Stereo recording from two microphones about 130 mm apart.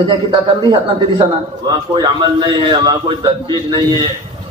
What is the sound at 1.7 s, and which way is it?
A man's voice, 35° right (ahead or behind).